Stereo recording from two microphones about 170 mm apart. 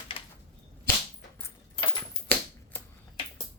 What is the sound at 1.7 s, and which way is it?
Keys jangling, 30° left (ahead or behind).